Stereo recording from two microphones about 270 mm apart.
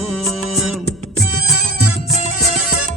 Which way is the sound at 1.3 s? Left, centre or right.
Right.